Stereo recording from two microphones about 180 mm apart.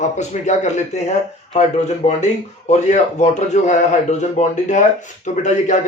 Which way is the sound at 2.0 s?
40° left (ahead or behind).